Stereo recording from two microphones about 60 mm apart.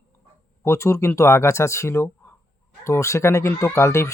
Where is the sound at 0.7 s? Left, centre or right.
Left.